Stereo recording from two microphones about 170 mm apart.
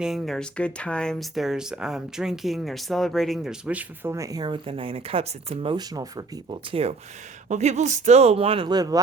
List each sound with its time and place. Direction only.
0.0 s speech: centre (ahead or behind); by 6.9 s 35° right (ahead or behind)
7.4 s speech: 45° right (ahead or behind); by 9.0 s 25° right (ahead or behind)